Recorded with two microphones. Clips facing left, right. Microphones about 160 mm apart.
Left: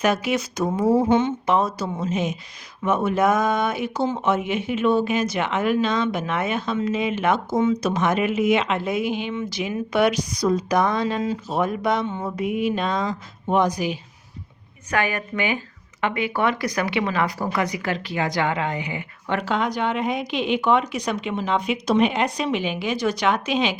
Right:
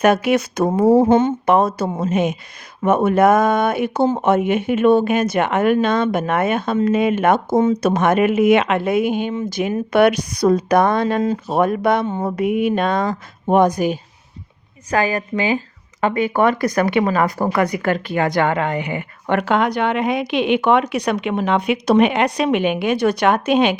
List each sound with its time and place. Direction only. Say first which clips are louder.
0.0 s speech: right 6 dB; 60° right (ahead or behind)
1.0 s speech: right 5 dB; 50° right (ahead or behind)
14.8 s speech: right 5 dB; 35° right (ahead or behind); by 23.7 s 55° right (ahead or behind)